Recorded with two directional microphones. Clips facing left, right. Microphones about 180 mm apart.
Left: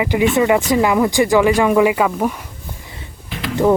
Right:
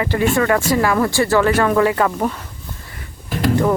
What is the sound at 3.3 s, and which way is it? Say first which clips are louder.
Typing: right 7 dB; 45° right (ahead or behind).